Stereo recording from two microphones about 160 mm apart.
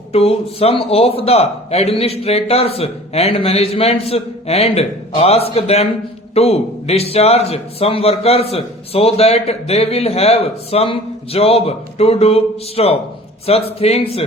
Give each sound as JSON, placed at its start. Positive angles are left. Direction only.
{"t": 0.1, "sound": "a man's voice", "side_deg": 40}